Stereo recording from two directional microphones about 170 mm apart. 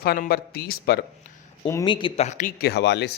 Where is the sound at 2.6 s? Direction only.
75° left (ahead or behind).